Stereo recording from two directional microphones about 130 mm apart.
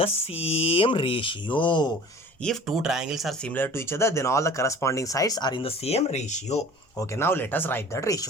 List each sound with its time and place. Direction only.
0.0 s speech: 50° left (ahead or behind)
2.4 s speech: centre (ahead or behind)
3.5 s speech: 15° left (ahead or behind); by 5.6 s 35° left (ahead or behind)
5.6 s speech: 50° left (ahead or behind)
7.1 s speech: 20° left (ahead or behind)